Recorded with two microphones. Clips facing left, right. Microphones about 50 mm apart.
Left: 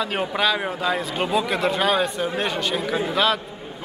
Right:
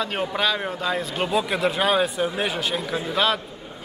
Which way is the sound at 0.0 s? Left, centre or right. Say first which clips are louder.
Left 1 dB; centre.